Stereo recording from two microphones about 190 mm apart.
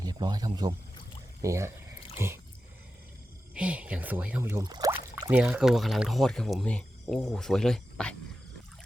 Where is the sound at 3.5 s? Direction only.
5° right (ahead or behind).